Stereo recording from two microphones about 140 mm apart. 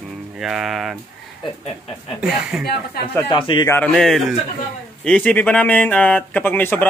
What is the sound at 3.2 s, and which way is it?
Speech, 35° left (ahead or behind).